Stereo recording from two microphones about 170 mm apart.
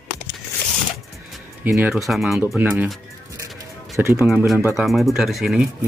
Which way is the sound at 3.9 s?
15° right (ahead or behind).